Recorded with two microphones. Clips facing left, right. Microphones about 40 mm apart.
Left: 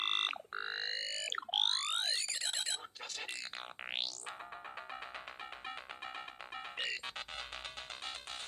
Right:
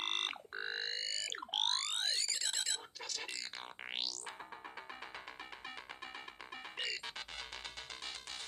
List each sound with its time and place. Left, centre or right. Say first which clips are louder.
0.0 s a sound: left 3 dB; left
3.9 s music: left 1 dB; left
6.7 s music: left 1 dB; left